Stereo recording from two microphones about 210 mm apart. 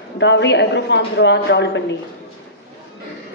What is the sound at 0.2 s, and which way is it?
A woman's voice, 55° left (ahead or behind).